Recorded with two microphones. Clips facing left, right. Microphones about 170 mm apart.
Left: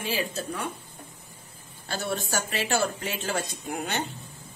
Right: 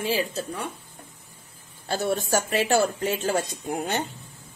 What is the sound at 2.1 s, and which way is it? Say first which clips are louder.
Speech: right 5 dB; 45° right (ahead or behind).